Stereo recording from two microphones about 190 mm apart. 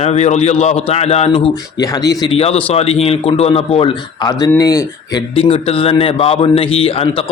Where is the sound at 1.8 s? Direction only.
20° left (ahead or behind).